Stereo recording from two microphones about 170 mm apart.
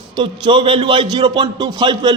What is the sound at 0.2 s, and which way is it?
A man's voice, 30° right (ahead or behind).